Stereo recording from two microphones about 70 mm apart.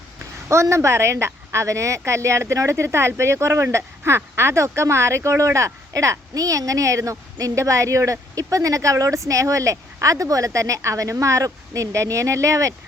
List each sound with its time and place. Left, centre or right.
0.4 s speech: right